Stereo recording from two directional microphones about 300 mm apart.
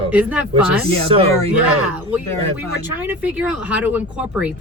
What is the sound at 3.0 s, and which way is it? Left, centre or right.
Speech, centre.